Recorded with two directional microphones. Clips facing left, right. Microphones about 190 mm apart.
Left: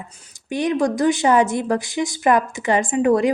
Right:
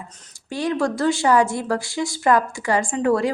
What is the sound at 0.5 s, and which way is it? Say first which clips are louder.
A woman's voice: left 3 dB; 20° left (ahead or behind).